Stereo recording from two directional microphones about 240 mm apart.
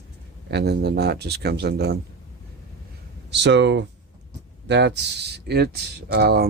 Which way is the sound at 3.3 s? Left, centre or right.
Right.